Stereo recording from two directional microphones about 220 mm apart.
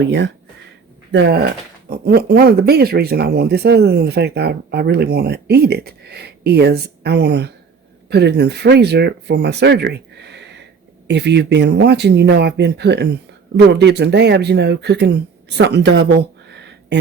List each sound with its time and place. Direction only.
0.0 s speech: 55° right (ahead or behind)